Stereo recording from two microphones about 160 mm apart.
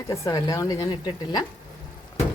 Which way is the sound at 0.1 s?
20° left (ahead or behind).